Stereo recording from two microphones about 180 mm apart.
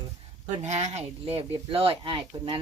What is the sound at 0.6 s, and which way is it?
Speech, 40° right (ahead or behind).